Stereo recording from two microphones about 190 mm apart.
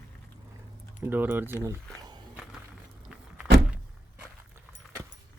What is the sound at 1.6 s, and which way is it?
Speech, 20° right (ahead or behind).